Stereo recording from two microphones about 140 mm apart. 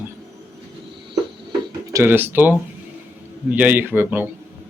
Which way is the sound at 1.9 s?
15° right (ahead or behind).